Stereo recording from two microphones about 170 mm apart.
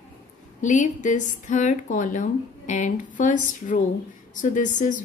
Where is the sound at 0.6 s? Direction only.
50° left (ahead or behind).